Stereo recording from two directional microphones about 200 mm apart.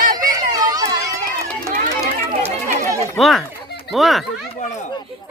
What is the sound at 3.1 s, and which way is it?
Speech, centre (ahead or behind).